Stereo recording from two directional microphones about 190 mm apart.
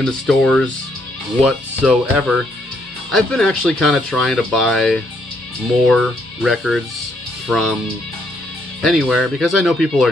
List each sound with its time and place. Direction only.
0.0 s speech: 5° left (ahead or behind)
8.8 s speech: 5° right (ahead or behind)